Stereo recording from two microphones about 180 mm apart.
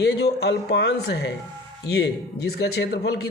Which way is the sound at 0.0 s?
65° left (ahead or behind).